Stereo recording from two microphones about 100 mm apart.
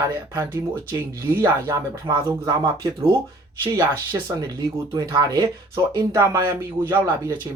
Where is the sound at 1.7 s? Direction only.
45° right (ahead or behind).